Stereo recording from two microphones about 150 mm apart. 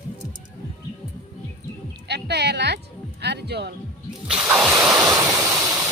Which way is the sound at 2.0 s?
90° right.